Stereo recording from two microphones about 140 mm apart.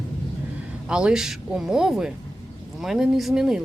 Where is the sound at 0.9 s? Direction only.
5° right (ahead or behind).